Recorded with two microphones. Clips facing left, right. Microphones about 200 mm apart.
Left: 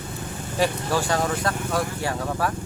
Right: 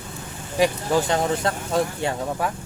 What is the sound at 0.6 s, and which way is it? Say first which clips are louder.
Speech: right 3 dB; 20° right (ahead or behind).